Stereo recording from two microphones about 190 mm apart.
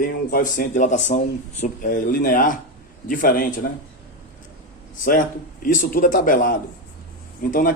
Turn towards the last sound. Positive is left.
turn(degrees=45)  # may be behind; listen again after turning